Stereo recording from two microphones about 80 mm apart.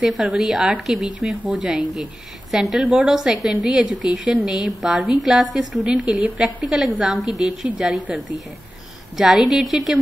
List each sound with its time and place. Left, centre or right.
0.0 s a woman's voice: centre
2.9 s a woman's voice: centre
3.2 s a woman's voice: centre
5.9 s a woman's voice: centre
9.1 s a woman's voice: centre